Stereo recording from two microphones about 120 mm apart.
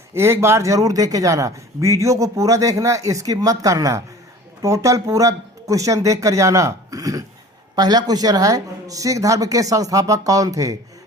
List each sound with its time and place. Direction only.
0.1 s speech: 20° right (ahead or behind)